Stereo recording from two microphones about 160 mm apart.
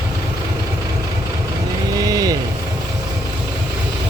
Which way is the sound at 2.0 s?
25° right (ahead or behind).